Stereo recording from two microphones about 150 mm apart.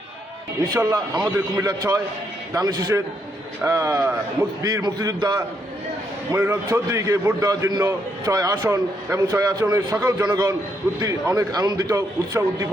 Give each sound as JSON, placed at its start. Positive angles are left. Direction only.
{"t": 0.7, "sound": "a man's voice", "side_deg": -25}